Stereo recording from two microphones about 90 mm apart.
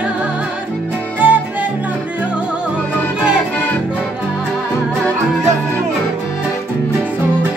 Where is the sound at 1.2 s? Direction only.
20° right (ahead or behind).